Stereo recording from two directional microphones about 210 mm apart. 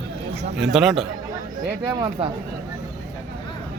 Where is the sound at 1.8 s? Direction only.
20° right (ahead or behind).